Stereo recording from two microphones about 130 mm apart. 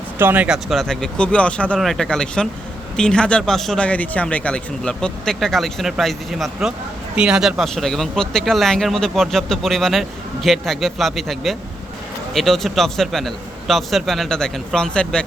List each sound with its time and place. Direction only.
0.2 s speech: 15° right (ahead or behind)
0.4 s speech: centre (ahead or behind)